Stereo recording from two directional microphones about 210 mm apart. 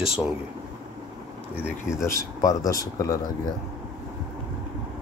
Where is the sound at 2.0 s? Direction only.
15° left (ahead or behind).